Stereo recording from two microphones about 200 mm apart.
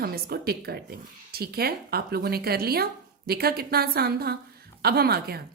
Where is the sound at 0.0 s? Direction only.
50° right (ahead or behind).